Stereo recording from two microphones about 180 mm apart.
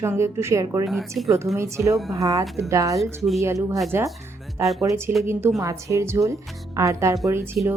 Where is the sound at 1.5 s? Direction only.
15° right (ahead or behind).